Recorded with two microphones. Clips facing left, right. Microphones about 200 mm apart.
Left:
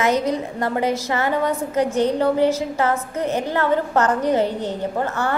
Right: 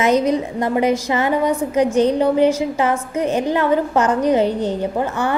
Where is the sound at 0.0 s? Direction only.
20° right (ahead or behind).